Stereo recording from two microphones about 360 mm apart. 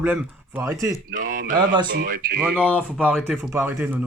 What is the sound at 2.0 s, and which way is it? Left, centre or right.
Speech, right.